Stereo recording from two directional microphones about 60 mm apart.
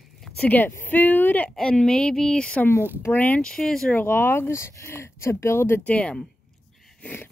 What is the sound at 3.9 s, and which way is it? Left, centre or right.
Speech, left.